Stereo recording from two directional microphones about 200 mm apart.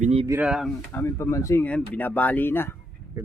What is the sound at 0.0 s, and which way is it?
Speech, 30° right (ahead or behind).